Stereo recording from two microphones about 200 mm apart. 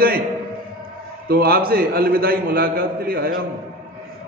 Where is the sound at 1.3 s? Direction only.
50° right (ahead or behind).